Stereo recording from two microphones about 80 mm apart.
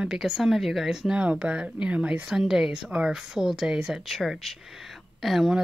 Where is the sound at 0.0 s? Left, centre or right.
Centre.